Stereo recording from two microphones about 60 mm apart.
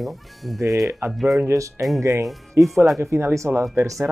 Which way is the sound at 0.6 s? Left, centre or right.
Right.